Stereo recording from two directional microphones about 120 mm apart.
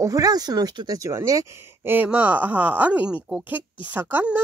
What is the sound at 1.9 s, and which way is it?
Speech, 15° right (ahead or behind).